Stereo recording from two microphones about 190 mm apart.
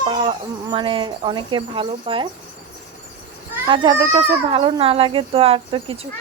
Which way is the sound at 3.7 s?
25° right (ahead or behind).